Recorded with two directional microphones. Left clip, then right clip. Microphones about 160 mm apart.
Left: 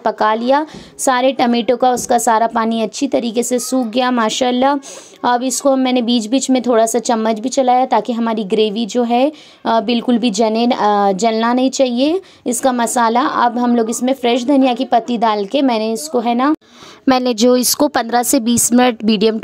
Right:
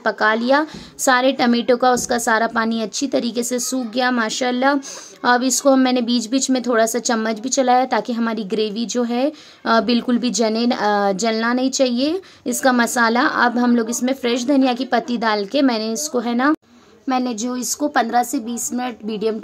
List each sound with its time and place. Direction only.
0.0 s a woman's voice: 15° left (ahead or behind)
17.0 s speech: 70° left (ahead or behind)